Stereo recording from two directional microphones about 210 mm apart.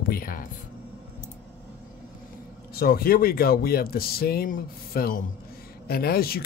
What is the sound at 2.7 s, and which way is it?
Speech, 45° left (ahead or behind).